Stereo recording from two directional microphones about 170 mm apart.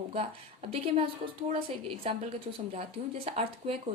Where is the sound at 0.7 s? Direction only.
35° right (ahead or behind).